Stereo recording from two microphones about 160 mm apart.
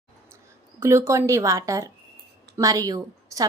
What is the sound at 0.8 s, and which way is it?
A woman's voice, 15° right (ahead or behind).